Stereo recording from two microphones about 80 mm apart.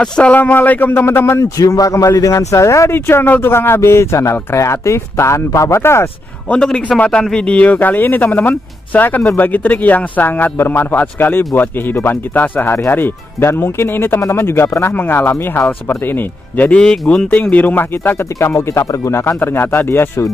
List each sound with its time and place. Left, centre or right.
0.0 s speech: centre; by 1.4 s left
1.4 s speech: left
2.9 s speech: left
6.5 s a man's voice: centre
16.8 s speech: centre; by 20.3 s left